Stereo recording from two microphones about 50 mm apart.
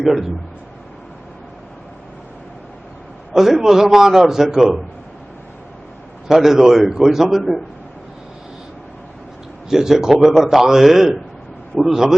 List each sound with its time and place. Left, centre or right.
0.0 s speech: centre
3.3 s a man's voice: centre
6.2 s a man's voice: centre
9.6 s a man's voice: centre